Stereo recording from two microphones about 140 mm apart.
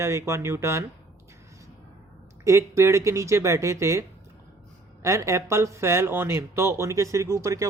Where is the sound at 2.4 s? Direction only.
20° right (ahead or behind).